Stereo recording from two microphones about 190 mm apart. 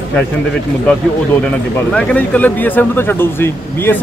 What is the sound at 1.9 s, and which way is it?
Speech, 5° left (ahead or behind).